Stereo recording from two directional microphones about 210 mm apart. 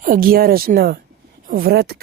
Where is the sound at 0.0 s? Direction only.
45° right (ahead or behind).